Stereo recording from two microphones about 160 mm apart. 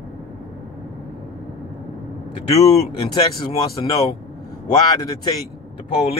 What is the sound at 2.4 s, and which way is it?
Speech, 40° left (ahead or behind).